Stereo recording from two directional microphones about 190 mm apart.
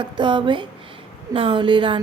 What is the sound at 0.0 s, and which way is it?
A woman's voice, 25° right (ahead or behind).